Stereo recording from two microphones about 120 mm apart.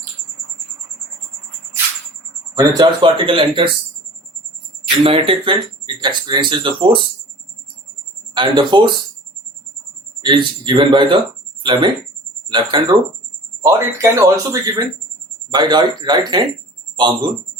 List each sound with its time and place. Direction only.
2.6 s speech: 25° right (ahead or behind)
2.8 s speech: 45° right (ahead or behind)
5.0 s speech: 50° right (ahead or behind)
8.4 s speech: 40° right (ahead or behind)
10.2 s speech: 40° right (ahead or behind)
13.6 s speech: 30° right (ahead or behind)